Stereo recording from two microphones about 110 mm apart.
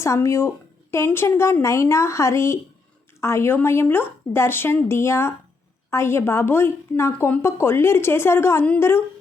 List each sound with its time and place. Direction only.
0.0 s a woman's voice: 25° left (ahead or behind)